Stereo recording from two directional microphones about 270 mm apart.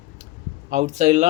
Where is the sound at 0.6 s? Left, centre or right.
Right.